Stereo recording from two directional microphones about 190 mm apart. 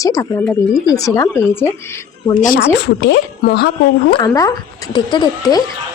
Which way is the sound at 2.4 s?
45° left (ahead or behind).